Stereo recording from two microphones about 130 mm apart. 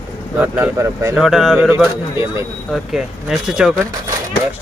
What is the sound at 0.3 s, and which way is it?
Speech, 10° right (ahead or behind).